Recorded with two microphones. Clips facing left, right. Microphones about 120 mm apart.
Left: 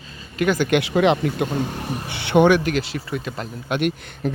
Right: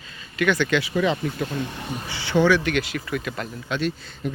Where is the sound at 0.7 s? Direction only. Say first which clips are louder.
Left 5 dB; 75° left (ahead or behind); by 2.7 s 55° left (ahead or behind).